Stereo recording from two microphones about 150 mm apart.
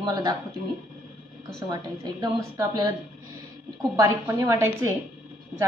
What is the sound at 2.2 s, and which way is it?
Speech, 20° right (ahead or behind).